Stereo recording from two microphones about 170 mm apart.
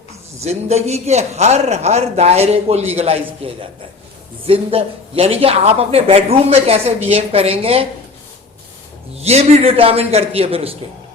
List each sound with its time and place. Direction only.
0.3 s speech: 40° right (ahead or behind)
9.1 s speech: 40° right (ahead or behind)